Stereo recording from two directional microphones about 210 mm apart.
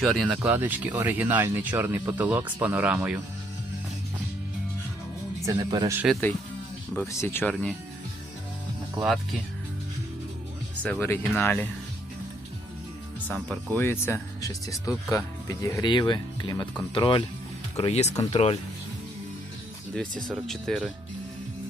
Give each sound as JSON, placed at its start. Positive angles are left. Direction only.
{"t": 0.0, "sound": "speech", "side_deg": 0}
{"t": 5.5, "sound": "speech", "side_deg": -15}
{"t": 6.0, "sound": "speech", "side_deg": 0}
{"t": 10.8, "sound": "speech", "side_deg": 10}
{"t": 13.2, "sound": "speech", "side_deg": 0}
{"t": 13.7, "sound": "speech", "side_deg": 10}
{"t": 18.1, "sound": "speech", "side_deg": 15}
{"t": 19.9, "sound": "speech", "side_deg": 5}